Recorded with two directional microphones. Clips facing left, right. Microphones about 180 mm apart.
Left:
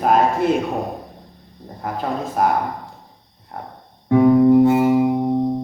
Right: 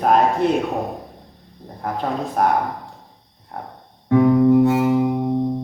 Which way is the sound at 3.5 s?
Centre (ahead or behind).